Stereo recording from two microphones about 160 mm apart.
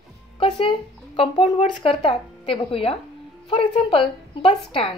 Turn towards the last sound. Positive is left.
turn(degrees=35)  # may be behind; listen again after turning